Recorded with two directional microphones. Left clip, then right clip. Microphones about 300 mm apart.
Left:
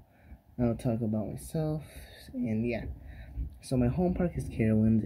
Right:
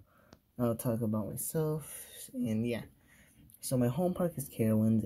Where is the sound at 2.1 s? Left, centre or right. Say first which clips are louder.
Left 2 dB; right.